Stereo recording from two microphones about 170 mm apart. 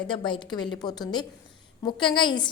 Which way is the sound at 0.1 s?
30° left (ahead or behind).